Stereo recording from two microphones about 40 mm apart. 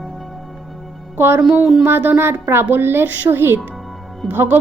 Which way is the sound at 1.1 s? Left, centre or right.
Right.